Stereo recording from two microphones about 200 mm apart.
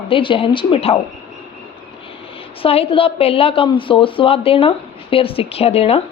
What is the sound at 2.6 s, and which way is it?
A woman's voice, 30° left (ahead or behind).